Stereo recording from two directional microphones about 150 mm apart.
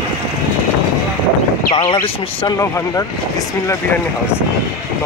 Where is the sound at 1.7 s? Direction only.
30° left (ahead or behind).